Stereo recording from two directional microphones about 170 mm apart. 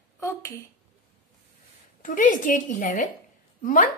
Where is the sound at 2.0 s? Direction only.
50° left (ahead or behind).